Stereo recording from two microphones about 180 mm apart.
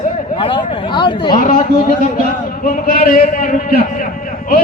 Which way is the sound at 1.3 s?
50° left (ahead or behind).